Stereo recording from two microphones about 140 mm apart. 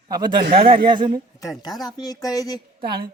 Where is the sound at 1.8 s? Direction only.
25° left (ahead or behind).